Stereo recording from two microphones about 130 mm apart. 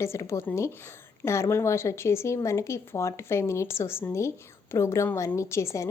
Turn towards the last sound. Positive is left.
turn(degrees=20)  # may be behind; listen again after turning